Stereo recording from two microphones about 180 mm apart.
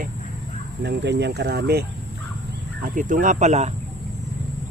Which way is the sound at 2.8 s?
45° right (ahead or behind).